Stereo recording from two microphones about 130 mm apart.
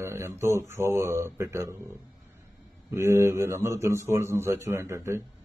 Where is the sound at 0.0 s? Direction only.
20° right (ahead or behind).